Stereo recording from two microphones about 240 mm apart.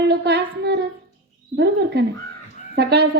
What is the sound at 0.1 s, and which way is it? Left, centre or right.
A woman's voice, right.